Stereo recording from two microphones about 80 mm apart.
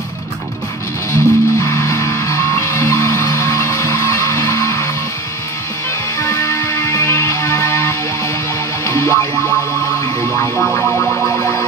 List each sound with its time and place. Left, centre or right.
1.1 s music: left
6.1 s music: left
10.6 s music: centre